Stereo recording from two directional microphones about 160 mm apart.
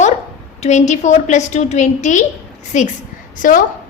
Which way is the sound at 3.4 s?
55° left (ahead or behind).